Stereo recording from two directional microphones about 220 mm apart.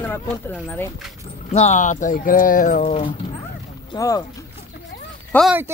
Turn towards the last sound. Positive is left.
turn(degrees=-5)  # may be behind; listen again after turning